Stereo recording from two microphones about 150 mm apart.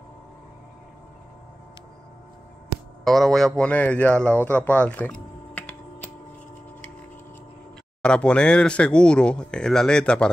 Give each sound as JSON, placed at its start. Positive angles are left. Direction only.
{"t": 3.0, "sound": "speech", "side_deg": 0}
{"t": 4.5, "sound": "typing", "side_deg": 10}
{"t": 8.0, "sound": "speech", "side_deg": 5}